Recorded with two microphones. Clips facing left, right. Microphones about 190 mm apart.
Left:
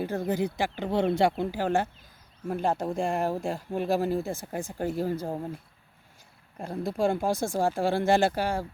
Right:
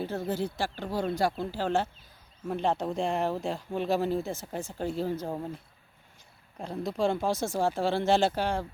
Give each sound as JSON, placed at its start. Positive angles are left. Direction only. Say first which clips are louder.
{"t": 0.0, "sound": "speech", "louder": "left 3 dB", "side_deg": 15}
{"t": 6.6, "sound": "speech", "louder": "left 2 dB", "side_deg": 10}